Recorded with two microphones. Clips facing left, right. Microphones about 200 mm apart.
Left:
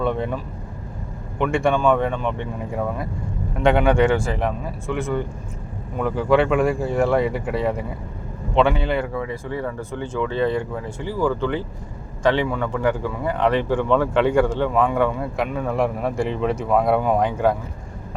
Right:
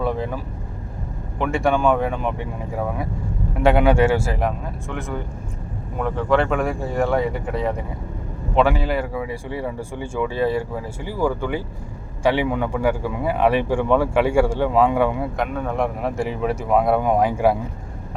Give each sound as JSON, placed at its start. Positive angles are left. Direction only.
{"t": 0.0, "sound": "speech", "side_deg": -5}
{"t": 1.4, "sound": "speech", "side_deg": 0}
{"t": 3.6, "sound": "speech", "side_deg": -5}
{"t": 15.4, "sound": "speech", "side_deg": 0}